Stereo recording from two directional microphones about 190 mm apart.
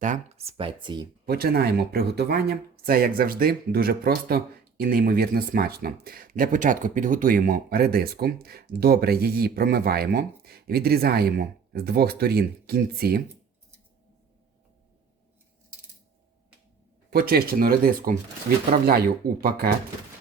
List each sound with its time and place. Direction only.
0.0 s speech: 35° right (ahead or behind)
1.2 s speech: 55° right (ahead or behind)
17.1 s speech: 55° right (ahead or behind)